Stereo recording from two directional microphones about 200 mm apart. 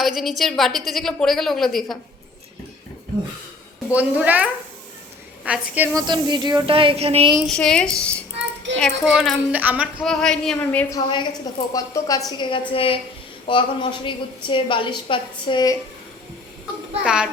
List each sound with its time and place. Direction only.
0.0 s a woman's voice: centre (ahead or behind)
3.9 s a woman's voice: 5° right (ahead or behind)
5.5 s speech: 10° right (ahead or behind); by 7.3 s 30° right (ahead or behind)
7.4 s a woman's voice: 5° left (ahead or behind)
10.9 s a woman's voice: 25° left (ahead or behind)
17.0 s a woman's voice: 5° right (ahead or behind)